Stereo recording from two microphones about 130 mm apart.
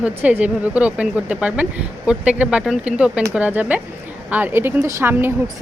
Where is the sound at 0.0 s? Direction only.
10° right (ahead or behind).